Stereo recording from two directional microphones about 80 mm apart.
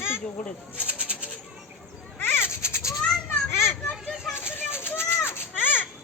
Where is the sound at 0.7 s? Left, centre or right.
Centre.